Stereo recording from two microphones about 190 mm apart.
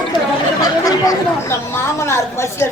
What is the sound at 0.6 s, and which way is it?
Speech, 20° left (ahead or behind).